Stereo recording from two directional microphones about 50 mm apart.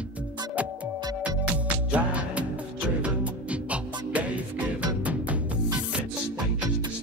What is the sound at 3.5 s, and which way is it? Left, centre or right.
Music, right.